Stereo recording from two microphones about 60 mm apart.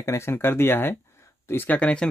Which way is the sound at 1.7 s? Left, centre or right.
Left.